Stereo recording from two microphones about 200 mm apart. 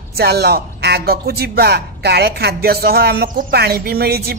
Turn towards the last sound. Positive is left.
turn(degrees=-50)  # may be behind; listen again after turning